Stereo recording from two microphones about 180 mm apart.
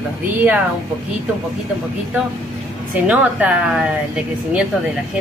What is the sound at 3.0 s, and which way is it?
Speech, 5° right (ahead or behind).